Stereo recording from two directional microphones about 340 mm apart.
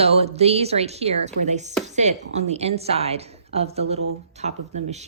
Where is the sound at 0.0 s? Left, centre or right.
Centre.